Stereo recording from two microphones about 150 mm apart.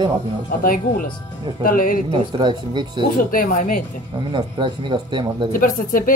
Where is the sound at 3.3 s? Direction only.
65° left (ahead or behind).